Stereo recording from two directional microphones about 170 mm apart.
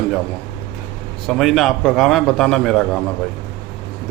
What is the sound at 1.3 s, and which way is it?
Speech, centre (ahead or behind).